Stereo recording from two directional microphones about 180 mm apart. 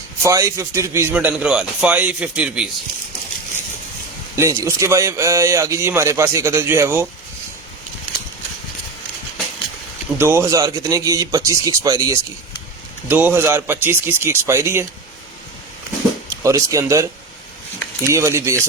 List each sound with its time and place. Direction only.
0.2 s speech: 15° right (ahead or behind)
4.4 s speech: 15° right (ahead or behind)
10.2 s speech: 15° right (ahead or behind)
13.1 s speech: 10° right (ahead or behind)
16.4 s speech: 15° right (ahead or behind)